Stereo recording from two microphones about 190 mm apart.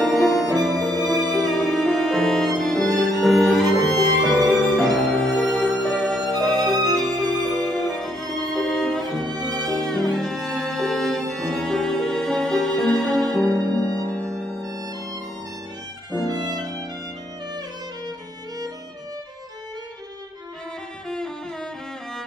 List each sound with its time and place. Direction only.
0.0 s music: centre (ahead or behind)
14.2 s music: 20° right (ahead or behind)
16.3 s violin: 20° right (ahead or behind)